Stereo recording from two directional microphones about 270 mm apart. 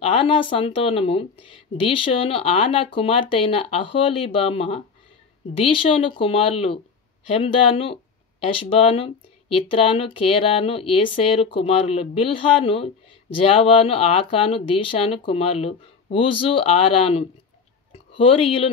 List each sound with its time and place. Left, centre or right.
0.1 s speech: centre